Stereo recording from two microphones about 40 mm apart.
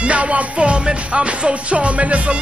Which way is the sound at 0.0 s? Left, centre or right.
Right.